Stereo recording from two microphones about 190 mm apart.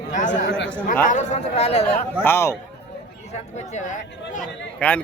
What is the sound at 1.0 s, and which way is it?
Speech, 40° left (ahead or behind).